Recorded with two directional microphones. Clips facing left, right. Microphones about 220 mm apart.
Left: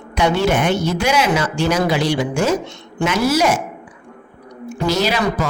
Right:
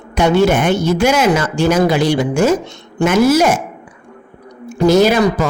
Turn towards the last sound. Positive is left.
turn(degrees=-50)  # may be behind; listen again after turning